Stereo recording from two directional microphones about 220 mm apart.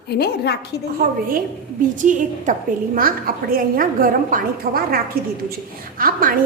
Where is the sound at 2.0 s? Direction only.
35° right (ahead or behind).